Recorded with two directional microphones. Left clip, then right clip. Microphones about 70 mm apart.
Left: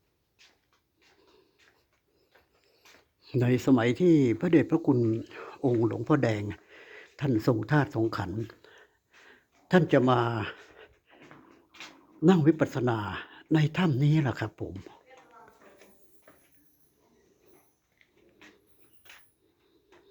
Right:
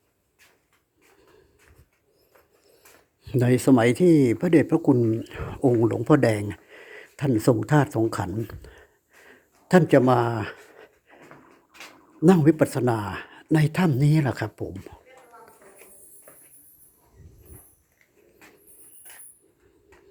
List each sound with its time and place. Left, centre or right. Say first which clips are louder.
3.2 s speech: right 5 dB; right
6.5 s a sound: right 4 dB; right
7.6 s speech: right 5 dB; right
8.8 s a sound: right 4 dB; centre
9.6 s speech: right 5 dB; right
10.7 s pant: right 4 dB; right
12.2 s speech: right 5 dB; right; by 15.0 s centre